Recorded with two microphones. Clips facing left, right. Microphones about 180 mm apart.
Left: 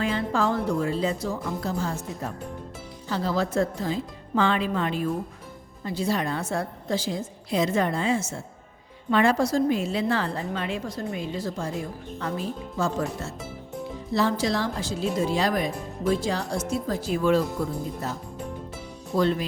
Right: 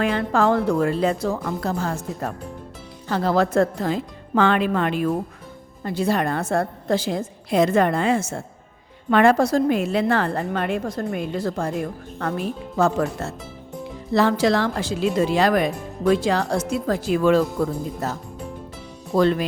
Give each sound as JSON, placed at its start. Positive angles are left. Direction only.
{"t": 0.0, "sound": "speech", "side_deg": -65}
{"t": 3.1, "sound": "speech", "side_deg": -60}
{"t": 19.1, "sound": "speech", "side_deg": -70}